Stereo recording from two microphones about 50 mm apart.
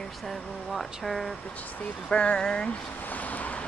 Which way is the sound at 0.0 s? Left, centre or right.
Centre.